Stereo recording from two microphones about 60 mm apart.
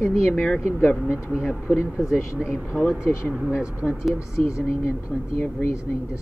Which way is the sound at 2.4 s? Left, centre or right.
Centre.